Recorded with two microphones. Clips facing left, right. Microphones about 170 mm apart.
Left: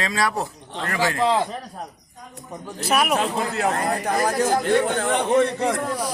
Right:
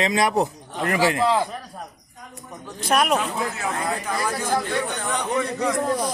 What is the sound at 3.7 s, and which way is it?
Speech, 40° left (ahead or behind).